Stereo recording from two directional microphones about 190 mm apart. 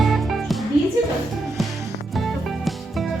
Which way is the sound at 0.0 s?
Centre (ahead or behind).